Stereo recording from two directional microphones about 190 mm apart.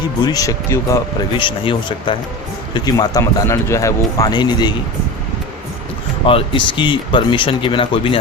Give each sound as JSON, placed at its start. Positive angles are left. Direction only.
{"t": 0.3, "sound": "speech", "side_deg": 20}
{"t": 6.2, "sound": "speech", "side_deg": 25}